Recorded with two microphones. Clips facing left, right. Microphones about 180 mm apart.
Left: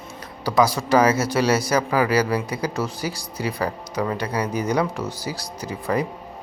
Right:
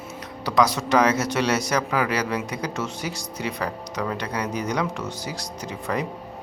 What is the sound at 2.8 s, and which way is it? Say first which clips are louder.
Speech: left 3 dB; 35° left (ahead or behind).